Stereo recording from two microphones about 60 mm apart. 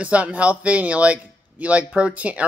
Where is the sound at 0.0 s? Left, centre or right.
Right.